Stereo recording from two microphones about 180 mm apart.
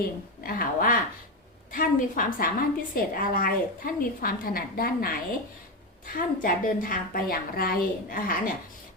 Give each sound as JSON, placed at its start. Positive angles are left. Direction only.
{"t": 0.0, "sound": "a woman's voice", "side_deg": 50}
{"t": 6.1, "sound": "a woman's voice", "side_deg": 50}